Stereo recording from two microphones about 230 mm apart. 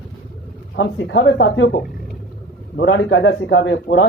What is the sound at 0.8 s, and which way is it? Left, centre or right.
Speech, left.